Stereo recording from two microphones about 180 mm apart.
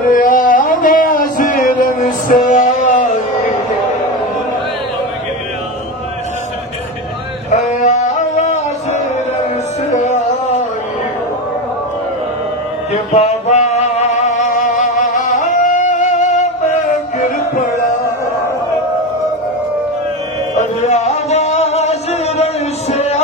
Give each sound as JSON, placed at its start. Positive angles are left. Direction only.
{"t": 0.1, "sound": "a sound", "side_deg": 50}
{"t": 7.8, "sound": "music", "side_deg": 40}
{"t": 12.9, "sound": "music", "side_deg": 40}
{"t": 20.5, "sound": "music", "side_deg": 40}